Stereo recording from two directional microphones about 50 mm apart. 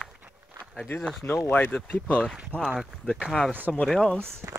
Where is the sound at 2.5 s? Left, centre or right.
Right.